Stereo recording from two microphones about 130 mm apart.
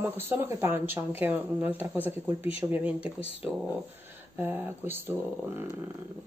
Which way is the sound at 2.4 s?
50° left (ahead or behind).